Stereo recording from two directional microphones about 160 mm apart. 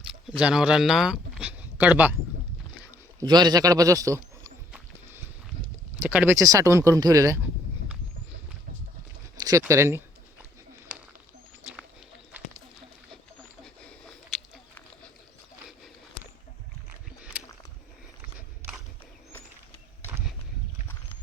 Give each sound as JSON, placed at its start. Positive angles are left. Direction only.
{"t": 0.0, "sound": "speech", "side_deg": -5}
{"t": 3.2, "sound": "speech", "side_deg": -25}
{"t": 6.0, "sound": "speech", "side_deg": -10}
{"t": 9.4, "sound": "speech", "side_deg": -20}
{"t": 14.3, "sound": "chewing", "side_deg": 0}
{"t": 17.3, "sound": "a sound", "side_deg": -10}